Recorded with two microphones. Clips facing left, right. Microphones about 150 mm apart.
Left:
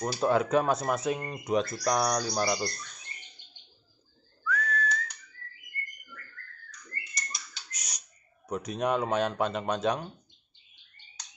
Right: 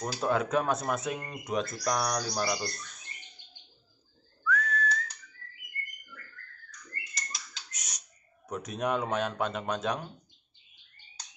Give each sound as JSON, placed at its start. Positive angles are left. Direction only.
{"t": 0.0, "sound": "speech", "side_deg": 0}
{"t": 4.5, "sound": "whistling", "side_deg": 0}
{"t": 7.2, "sound": "a sound", "side_deg": -90}
{"t": 7.7, "sound": "bird", "side_deg": 0}
{"t": 8.5, "sound": "speech", "side_deg": 0}